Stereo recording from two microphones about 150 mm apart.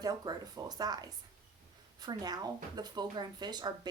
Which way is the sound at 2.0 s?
25° right (ahead or behind).